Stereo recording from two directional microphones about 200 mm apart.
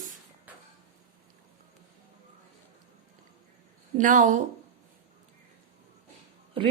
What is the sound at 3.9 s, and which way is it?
Speech, 40° right (ahead or behind).